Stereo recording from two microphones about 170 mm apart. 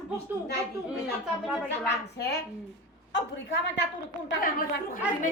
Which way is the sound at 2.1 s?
75° left (ahead or behind).